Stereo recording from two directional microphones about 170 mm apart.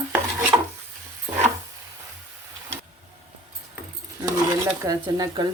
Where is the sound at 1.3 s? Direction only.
15° right (ahead or behind).